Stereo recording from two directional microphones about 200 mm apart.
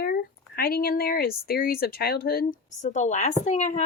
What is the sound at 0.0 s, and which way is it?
Speech, 50° left (ahead or behind).